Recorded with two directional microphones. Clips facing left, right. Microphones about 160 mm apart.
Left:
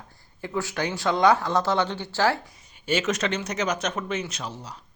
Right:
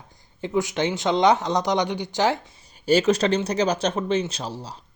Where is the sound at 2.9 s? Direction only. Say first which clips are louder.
Right 6 dB; 35° right (ahead or behind).